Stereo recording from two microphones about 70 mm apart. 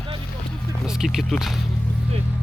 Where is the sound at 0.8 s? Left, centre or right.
Centre.